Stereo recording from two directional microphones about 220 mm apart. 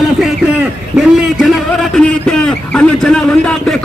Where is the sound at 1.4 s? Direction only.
Centre (ahead or behind).